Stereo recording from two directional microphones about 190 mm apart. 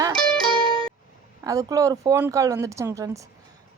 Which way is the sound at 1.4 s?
15° right (ahead or behind).